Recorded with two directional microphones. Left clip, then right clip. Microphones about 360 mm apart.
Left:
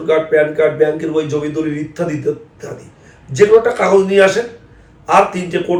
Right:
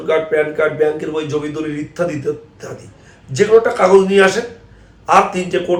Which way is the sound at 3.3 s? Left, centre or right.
Centre.